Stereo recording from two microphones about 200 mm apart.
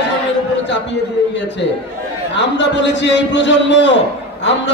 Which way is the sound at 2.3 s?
60° left (ahead or behind).